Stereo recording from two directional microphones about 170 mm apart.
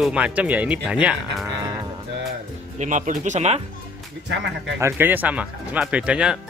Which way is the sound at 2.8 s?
45° right (ahead or behind).